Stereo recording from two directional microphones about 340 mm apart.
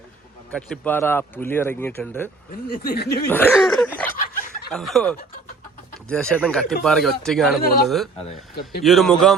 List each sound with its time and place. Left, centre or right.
0.5 s speech: centre
2.5 s speech: left
3.2 s a sound: centre
4.1 s a sound: left
4.7 s speech: centre
8.2 s speech: left
8.8 s speech: centre